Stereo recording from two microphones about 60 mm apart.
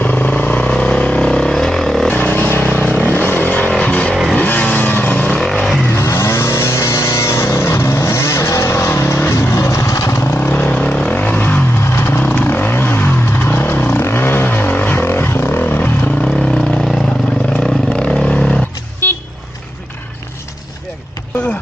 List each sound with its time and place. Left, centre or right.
0.0 s vehicle: left; by 2.0 s centre
2.0 s vehicle: left
5.4 s vehicle: centre
6.0 s vehicle: left
9.3 s vehicle: left
10.3 s vehicle: left
10.8 s vehicle: centre
11.9 s vehicle: left
12.2 s vehicle: left
16.2 s vehicle: centre
17.9 s vehicle: centre
19.0 s vehicle: left